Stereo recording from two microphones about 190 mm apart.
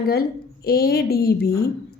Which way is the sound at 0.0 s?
50° left (ahead or behind).